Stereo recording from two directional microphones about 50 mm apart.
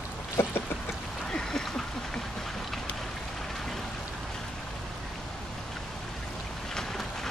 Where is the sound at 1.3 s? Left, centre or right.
Centre.